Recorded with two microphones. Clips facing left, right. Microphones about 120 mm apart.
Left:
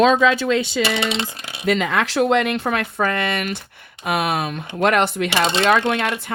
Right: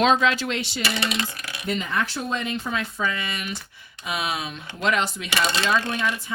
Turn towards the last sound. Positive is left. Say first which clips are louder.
# left 6 dB
turn(degrees=70)  # may be behind; listen again after turning